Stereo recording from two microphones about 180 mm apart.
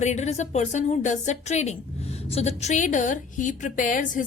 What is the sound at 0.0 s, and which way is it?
A woman's voice, 40° left (ahead or behind).